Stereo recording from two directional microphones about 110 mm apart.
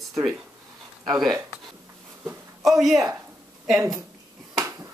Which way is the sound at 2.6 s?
5° right (ahead or behind).